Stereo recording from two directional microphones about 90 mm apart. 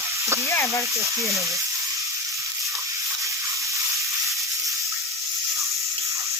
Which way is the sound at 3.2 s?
35° right (ahead or behind).